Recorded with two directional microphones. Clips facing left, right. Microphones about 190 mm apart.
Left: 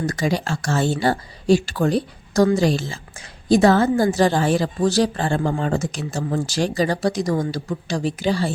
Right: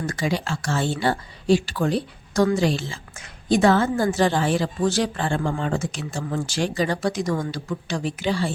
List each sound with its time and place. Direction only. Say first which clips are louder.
0.0 s speech: left 3 dB; 40° left (ahead or behind)